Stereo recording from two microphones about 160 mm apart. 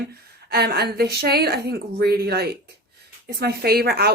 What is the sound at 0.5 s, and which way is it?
A woman's voice, 90° right.